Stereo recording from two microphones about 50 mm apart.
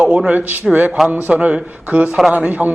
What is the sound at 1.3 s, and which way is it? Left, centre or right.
A man's voice, right.